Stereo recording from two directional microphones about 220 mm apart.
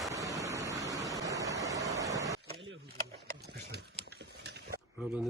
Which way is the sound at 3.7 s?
50° right (ahead or behind).